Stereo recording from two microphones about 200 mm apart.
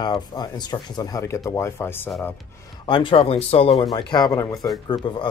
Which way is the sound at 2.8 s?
25° left (ahead or behind).